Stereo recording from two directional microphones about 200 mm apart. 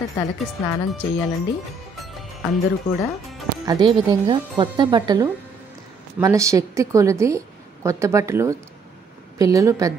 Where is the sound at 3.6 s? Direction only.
20° right (ahead or behind).